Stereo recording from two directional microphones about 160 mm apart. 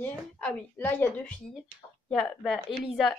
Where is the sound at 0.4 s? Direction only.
10° left (ahead or behind).